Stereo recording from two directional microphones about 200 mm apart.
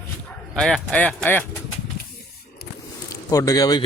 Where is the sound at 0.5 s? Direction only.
5° left (ahead or behind).